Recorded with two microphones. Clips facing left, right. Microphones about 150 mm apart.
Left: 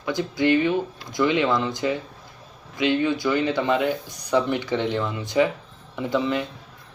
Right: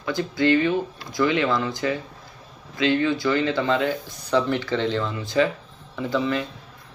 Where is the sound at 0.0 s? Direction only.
15° left (ahead or behind).